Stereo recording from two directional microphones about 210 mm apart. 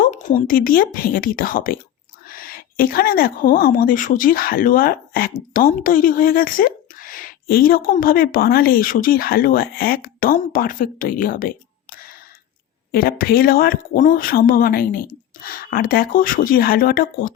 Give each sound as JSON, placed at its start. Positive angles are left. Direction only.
{"t": 0.0, "sound": "speech", "side_deg": 35}